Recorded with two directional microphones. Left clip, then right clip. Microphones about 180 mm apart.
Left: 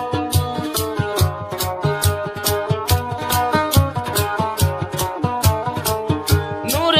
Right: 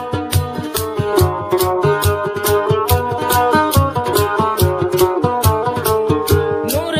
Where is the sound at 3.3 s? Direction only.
55° right (ahead or behind).